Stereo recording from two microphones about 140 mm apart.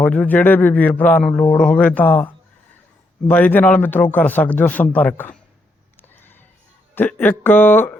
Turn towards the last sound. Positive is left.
turn(degrees=15)  # may be behind; listen again after turning